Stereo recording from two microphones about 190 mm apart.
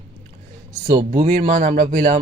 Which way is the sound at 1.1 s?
40° right (ahead or behind).